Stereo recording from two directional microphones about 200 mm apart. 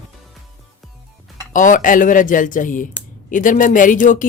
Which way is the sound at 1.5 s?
40° left (ahead or behind).